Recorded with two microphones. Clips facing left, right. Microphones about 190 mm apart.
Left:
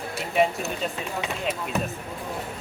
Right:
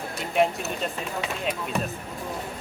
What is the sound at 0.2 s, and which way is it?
Speech, centre (ahead or behind).